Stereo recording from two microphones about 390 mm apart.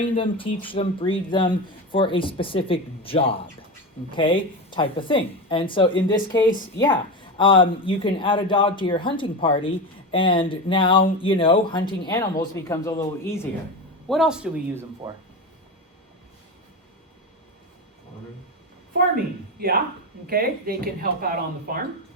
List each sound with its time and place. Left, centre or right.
0.0 s a woman's voice: centre
19.5 s speech: right